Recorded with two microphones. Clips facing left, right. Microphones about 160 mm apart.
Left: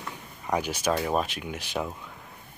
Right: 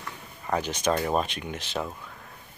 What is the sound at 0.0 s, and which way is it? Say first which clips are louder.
Speech: left 1 dB; 10° left (ahead or behind).